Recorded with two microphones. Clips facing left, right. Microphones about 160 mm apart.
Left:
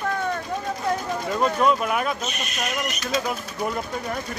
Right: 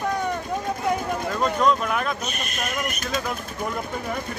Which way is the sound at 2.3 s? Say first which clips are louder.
Left 1 dB; 50° right (ahead or behind).